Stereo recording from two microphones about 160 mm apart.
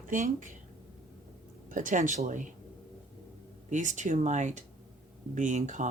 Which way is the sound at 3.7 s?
50° right (ahead or behind).